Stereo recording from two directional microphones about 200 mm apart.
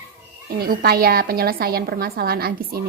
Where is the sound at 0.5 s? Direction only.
50° right (ahead or behind).